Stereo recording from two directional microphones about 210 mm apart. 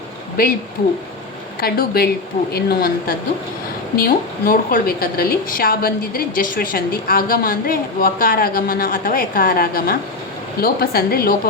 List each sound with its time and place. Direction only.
1.6 s a woman's voice: 45° left (ahead or behind)